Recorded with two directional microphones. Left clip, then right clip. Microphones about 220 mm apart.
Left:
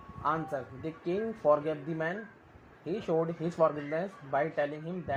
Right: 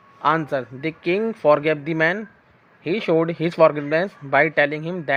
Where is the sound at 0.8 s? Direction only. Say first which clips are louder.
Right 11 dB; 35° right (ahead or behind).